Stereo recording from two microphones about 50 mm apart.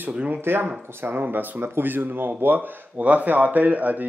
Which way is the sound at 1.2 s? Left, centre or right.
Right.